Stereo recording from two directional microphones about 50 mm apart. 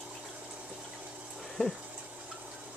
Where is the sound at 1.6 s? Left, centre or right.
Left.